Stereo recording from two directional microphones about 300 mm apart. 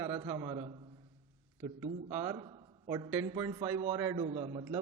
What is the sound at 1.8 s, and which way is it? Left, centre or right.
A man's voice, centre.